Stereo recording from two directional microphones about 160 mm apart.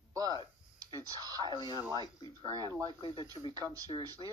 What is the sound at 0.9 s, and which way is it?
Speech, 25° right (ahead or behind).